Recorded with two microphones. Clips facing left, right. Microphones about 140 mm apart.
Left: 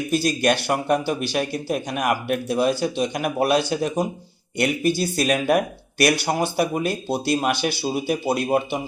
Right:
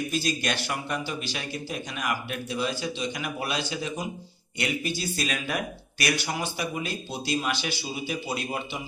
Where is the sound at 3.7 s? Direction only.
60° left (ahead or behind).